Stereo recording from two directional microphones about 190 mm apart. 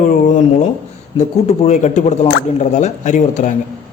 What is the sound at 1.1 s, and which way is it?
A man's voice, 35° left (ahead or behind).